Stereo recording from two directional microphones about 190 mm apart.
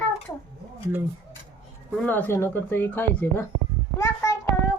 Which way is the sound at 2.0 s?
10° left (ahead or behind).